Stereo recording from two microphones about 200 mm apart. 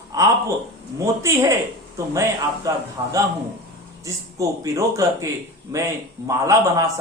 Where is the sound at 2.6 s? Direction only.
15° right (ahead or behind).